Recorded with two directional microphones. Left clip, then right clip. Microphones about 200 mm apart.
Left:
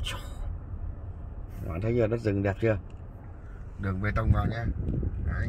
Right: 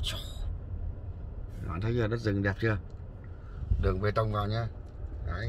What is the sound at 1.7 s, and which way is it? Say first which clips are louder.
Speech: left 5 dB; centre (ahead or behind).